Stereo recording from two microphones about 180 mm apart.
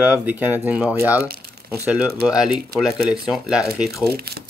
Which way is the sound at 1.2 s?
60° right (ahead or behind).